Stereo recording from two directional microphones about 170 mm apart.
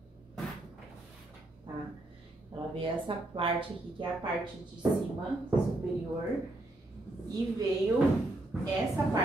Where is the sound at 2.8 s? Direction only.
30° right (ahead or behind).